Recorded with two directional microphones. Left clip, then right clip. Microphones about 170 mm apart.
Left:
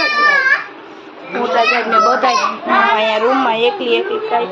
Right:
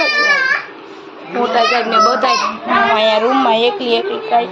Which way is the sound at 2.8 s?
20° right (ahead or behind).